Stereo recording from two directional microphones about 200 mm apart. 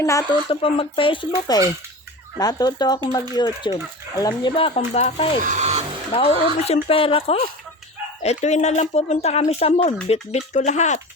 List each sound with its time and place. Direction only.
0.0 s speech: 15° left (ahead or behind)
0.5 s speech: 25° left (ahead or behind)
5.4 s a sound: 35° right (ahead or behind)
6.1 s speech: 30° left (ahead or behind)